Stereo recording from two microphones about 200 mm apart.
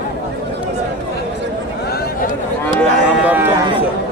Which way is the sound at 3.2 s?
10° right (ahead or behind).